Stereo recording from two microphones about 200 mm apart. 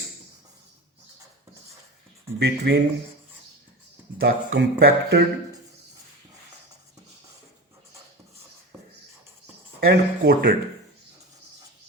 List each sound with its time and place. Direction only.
2.4 s speech: 60° right (ahead or behind)
4.2 s speech: 50° right (ahead or behind)
9.8 s speech: 50° right (ahead or behind)